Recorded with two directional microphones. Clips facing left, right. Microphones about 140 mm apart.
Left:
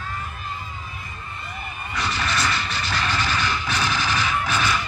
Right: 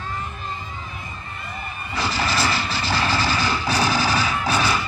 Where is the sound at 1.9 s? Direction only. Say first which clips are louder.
Right 3 dB; 30° right (ahead or behind).